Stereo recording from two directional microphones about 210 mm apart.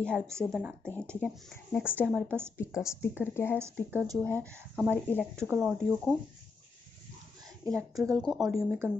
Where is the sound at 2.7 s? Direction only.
15° left (ahead or behind).